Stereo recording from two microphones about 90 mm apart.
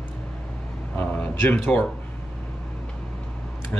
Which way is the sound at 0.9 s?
20° left (ahead or behind).